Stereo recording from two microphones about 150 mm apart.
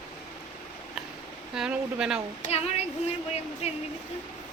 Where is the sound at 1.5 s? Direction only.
5° right (ahead or behind).